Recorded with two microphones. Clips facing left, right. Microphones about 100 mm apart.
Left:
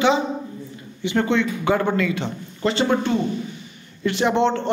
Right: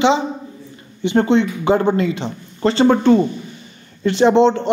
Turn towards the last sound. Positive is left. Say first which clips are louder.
# right 7 dB
turn(degrees=-25)  # may be behind; listen again after turning